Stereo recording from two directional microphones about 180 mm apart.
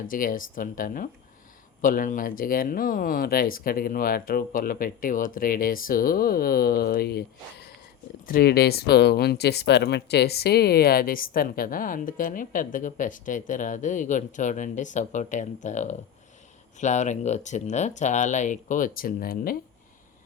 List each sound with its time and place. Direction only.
0.1 s speech: 50° left (ahead or behind)
8.3 s speech: 60° left (ahead or behind)